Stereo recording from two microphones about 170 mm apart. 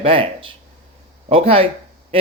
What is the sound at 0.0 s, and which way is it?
Speech, 30° right (ahead or behind).